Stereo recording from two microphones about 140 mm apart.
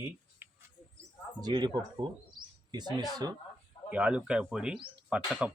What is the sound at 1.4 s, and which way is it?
Speech, 30° right (ahead or behind).